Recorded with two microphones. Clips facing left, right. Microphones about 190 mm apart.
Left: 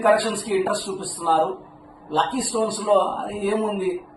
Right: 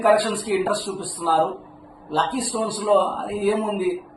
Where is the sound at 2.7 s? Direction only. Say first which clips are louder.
Right 2 dB; 10° right (ahead or behind).